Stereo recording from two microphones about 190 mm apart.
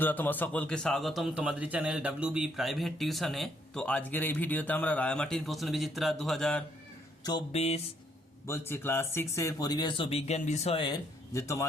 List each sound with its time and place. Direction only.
0.0 s a man's voice: 10° left (ahead or behind)
7.5 s speech: 35° left (ahead or behind)
8.4 s speech: 10° left (ahead or behind)